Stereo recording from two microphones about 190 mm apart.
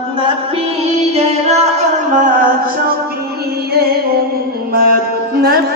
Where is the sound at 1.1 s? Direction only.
35° right (ahead or behind).